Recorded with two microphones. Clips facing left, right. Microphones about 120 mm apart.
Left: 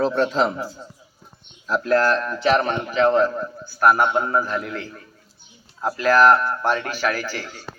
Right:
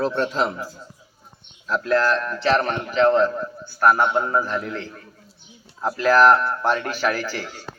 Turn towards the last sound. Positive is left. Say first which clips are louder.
# right 1 dB
turn(degrees=0)  # may be behind; listen again after turning